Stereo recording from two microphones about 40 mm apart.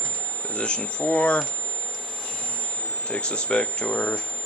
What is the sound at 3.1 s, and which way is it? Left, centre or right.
Speech, left.